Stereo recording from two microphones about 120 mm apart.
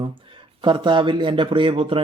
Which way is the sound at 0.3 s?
45° right (ahead or behind).